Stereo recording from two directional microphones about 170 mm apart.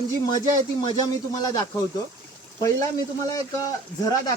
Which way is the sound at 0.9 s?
25° left (ahead or behind).